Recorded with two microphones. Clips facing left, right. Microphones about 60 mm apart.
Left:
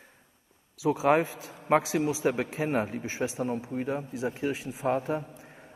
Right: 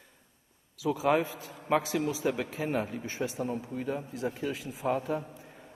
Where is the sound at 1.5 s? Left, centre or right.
Left.